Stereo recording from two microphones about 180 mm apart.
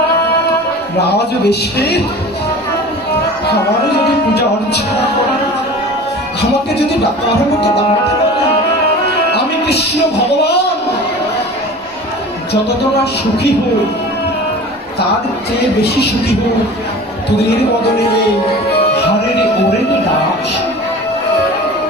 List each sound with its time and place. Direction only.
1.1 s a man's voice: 65° left (ahead or behind)
9.3 s music: 65° left (ahead or behind)